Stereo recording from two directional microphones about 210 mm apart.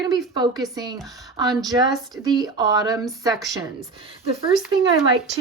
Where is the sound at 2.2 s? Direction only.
20° right (ahead or behind).